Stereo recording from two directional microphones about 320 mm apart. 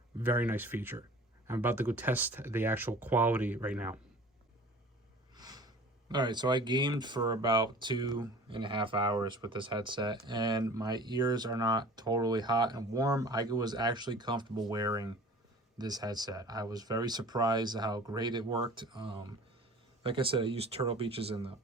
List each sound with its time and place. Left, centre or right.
0.2 s speech: centre
5.3 s speech: centre